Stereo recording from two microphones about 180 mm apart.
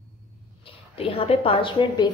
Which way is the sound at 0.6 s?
30° left (ahead or behind).